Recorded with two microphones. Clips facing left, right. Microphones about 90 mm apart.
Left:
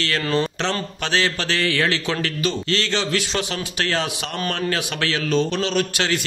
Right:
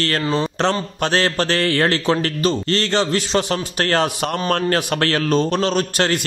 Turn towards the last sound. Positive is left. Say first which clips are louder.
# right 3 dB
turn(degrees=-45)  # may be behind; listen again after turning